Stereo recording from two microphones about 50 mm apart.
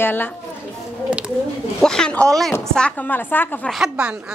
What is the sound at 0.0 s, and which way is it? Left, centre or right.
Speech, left.